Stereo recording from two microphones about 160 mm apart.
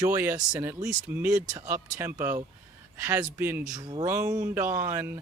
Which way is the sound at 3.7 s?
25° right (ahead or behind).